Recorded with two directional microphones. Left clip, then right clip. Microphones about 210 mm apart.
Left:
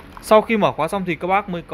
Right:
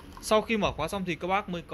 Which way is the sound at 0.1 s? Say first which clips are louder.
Left 11 dB; 10° left (ahead or behind).